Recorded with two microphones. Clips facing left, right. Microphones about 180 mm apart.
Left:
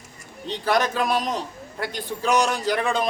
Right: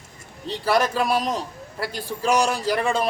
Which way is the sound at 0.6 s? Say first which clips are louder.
Right 1 dB; 5° right (ahead or behind).